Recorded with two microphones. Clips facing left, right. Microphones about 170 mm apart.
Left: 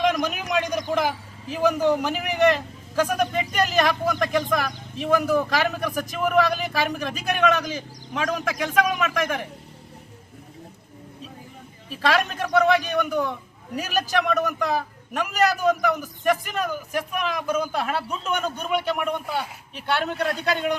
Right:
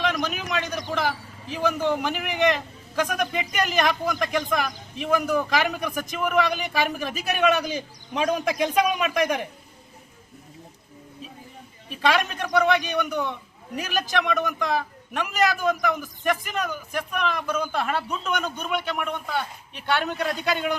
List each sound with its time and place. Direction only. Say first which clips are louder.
0.1 s a sound: left 3 dB; 10° left (ahead or behind)
0.5 s a man's voice: left 6 dB; 10° left (ahead or behind); by 7.6 s 10° right (ahead or behind)
7.7 s a man's voice: right 1 dB; 25° right (ahead or behind)
11.9 s a man's voice: even; centre (ahead or behind)
20.1 s a man's voice: left 1 dB; centre (ahead or behind)